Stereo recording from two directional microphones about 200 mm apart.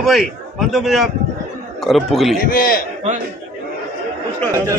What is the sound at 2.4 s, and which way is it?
Speech, 45° left (ahead or behind).